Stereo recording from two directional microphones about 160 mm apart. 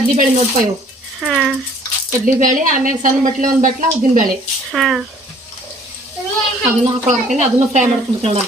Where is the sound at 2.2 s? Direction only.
55° right (ahead or behind).